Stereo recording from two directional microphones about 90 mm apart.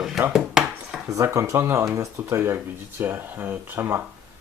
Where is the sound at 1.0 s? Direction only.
35° right (ahead or behind).